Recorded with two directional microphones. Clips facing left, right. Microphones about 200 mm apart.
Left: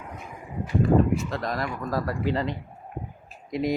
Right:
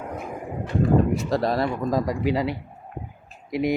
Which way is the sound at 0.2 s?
50° right (ahead or behind).